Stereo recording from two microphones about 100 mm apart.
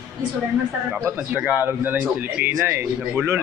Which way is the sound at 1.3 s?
15° right (ahead or behind).